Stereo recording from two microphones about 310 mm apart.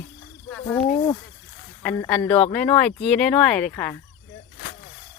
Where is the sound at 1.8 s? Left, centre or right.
Centre.